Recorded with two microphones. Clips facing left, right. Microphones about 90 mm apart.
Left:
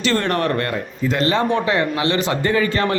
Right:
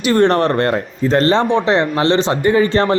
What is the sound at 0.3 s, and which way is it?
A man's voice, 30° right (ahead or behind).